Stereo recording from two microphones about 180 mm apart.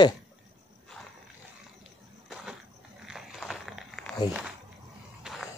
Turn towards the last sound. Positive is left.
turn(degrees=-5)  # may be behind; listen again after turning